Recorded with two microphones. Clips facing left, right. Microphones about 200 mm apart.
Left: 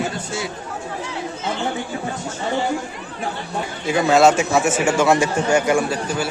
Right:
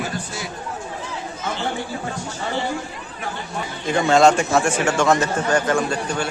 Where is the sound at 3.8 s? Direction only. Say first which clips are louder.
Left 1 dB; 5° left (ahead or behind).